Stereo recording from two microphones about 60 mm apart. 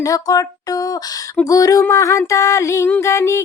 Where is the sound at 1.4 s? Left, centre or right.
Left.